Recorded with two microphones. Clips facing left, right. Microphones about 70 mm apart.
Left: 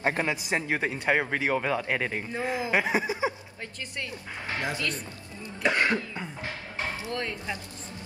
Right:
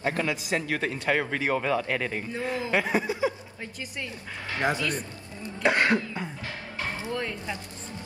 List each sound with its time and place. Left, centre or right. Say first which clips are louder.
0.0 s speech: even; left
4.6 s cough: right 5 dB; right